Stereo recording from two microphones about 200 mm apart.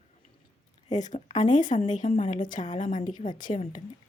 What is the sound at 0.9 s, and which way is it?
A woman's voice, 35° left (ahead or behind).